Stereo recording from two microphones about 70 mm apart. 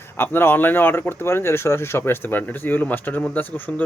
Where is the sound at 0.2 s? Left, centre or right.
Left.